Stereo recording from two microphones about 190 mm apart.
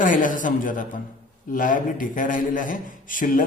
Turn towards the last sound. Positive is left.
turn(degrees=45)  # may be behind; listen again after turning